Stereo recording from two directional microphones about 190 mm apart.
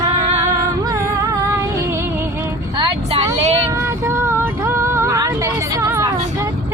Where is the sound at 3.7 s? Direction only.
15° right (ahead or behind).